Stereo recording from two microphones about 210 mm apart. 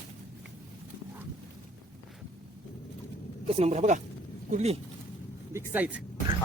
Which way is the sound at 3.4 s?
30° right (ahead or behind).